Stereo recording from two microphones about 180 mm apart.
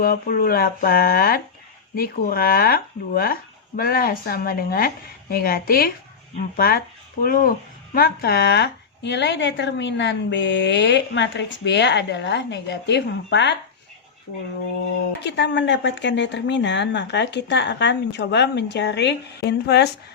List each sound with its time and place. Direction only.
0.0 s speech: 55° left (ahead or behind); by 13.6 s 75° left (ahead or behind)
15.2 s speech: 75° left (ahead or behind)